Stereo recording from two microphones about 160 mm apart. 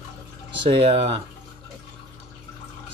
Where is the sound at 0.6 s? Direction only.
35° right (ahead or behind).